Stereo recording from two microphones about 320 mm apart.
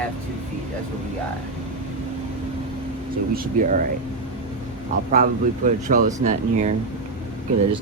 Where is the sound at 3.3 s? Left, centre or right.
Right.